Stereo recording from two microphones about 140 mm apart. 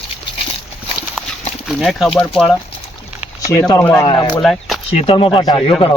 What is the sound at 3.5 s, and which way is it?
Speech, 25° left (ahead or behind).